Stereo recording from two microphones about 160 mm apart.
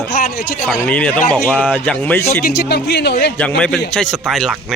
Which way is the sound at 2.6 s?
90° left.